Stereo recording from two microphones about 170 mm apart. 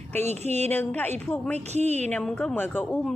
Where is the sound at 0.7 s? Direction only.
10° left (ahead or behind).